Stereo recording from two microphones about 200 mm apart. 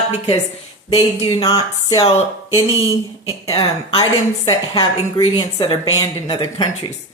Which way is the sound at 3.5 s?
25° left (ahead or behind).